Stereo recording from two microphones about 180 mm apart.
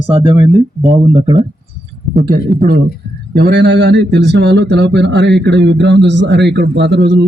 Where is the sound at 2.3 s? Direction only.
55° right (ahead or behind).